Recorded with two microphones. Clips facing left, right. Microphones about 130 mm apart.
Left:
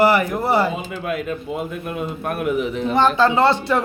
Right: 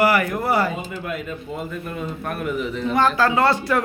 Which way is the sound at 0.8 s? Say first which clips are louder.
Left 4 dB; 85° left.